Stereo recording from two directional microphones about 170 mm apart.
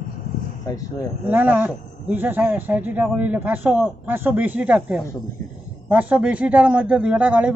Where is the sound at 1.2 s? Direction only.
10° right (ahead or behind).